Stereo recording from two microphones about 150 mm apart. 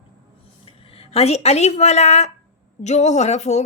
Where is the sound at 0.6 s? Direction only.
40° left (ahead or behind).